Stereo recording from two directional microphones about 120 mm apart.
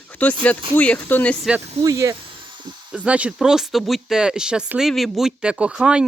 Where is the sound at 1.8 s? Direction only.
30° right (ahead or behind).